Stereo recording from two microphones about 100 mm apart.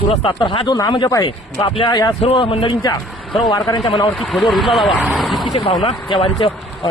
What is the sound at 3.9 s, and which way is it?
Speech, 50° left (ahead or behind).